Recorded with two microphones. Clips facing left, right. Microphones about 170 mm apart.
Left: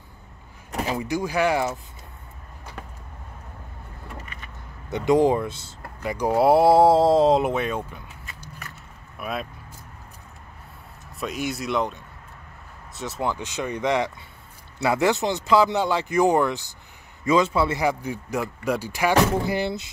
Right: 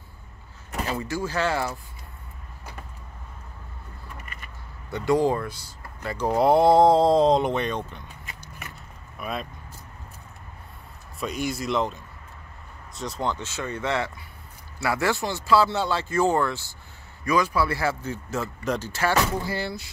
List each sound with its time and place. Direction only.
0.8 s speech: 15° left (ahead or behind)
4.8 s speech: 20° left (ahead or behind); by 9.5 s 5° left (ahead or behind)
11.1 s speech: centre (ahead or behind); by 19.9 s 20° left (ahead or behind)